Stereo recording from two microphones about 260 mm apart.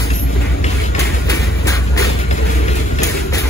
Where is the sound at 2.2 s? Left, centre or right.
Left.